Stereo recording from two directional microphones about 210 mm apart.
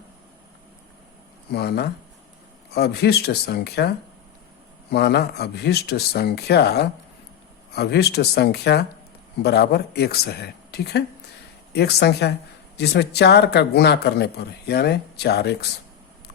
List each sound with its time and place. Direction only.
1.5 s speech: 50° left (ahead or behind)